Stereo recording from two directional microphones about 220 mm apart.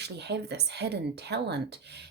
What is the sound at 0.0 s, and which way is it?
A woman's voice, 50° right (ahead or behind).